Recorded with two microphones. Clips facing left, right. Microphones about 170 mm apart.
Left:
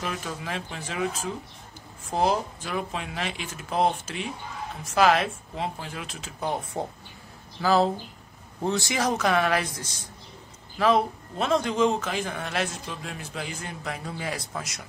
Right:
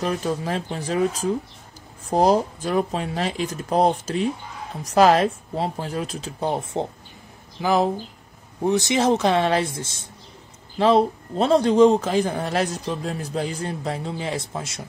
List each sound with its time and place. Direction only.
0.0 s a man's voice: 35° right (ahead or behind)